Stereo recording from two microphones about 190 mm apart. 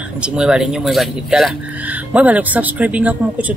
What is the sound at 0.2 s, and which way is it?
Speech, 5° right (ahead or behind).